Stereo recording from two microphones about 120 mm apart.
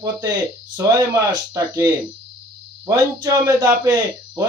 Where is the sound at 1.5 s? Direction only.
30° right (ahead or behind).